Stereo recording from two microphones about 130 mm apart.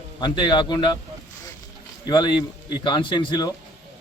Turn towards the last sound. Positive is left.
turn(degrees=35)  # may be behind; listen again after turning